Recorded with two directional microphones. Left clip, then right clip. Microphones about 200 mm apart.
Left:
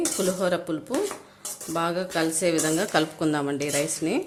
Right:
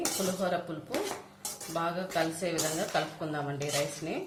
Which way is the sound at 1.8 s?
55° left (ahead or behind).